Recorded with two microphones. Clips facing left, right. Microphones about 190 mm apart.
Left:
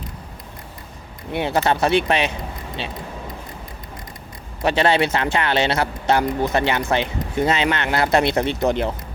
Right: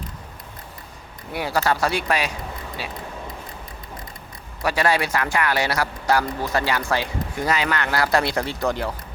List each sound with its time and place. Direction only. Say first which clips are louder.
1.3 s speech: left 3 dB; 25° left (ahead or behind)
4.6 s speech: left 4 dB; 25° left (ahead or behind)